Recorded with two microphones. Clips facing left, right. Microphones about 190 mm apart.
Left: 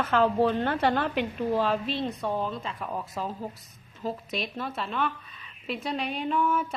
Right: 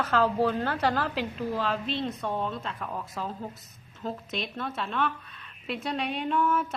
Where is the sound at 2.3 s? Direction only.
Centre (ahead or behind).